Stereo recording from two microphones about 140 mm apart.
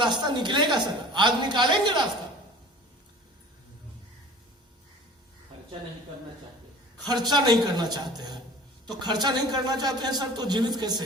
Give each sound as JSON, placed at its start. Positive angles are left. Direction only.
{"t": 0.0, "sound": "a woman's voice", "side_deg": -35}
{"t": 7.3, "sound": "a woman's voice", "side_deg": -30}